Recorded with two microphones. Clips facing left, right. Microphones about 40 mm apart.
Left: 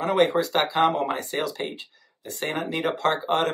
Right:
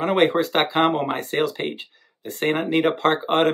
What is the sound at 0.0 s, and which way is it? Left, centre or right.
Speech, right.